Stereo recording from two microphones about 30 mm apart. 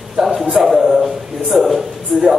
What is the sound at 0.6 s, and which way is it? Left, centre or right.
Speech, centre.